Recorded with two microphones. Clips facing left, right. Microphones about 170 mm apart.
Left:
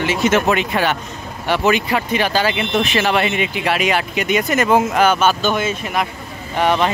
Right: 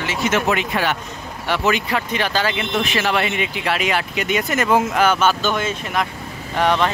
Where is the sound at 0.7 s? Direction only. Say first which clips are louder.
Left 3 dB; 30° left (ahead or behind).